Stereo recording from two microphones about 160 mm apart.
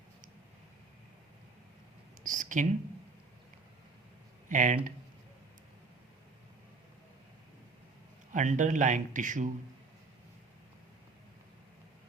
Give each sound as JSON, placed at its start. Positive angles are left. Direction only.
{"t": 2.2, "sound": "a sound", "side_deg": -55}
{"t": 4.4, "sound": "speech", "side_deg": -50}
{"t": 8.3, "sound": "speech", "side_deg": -50}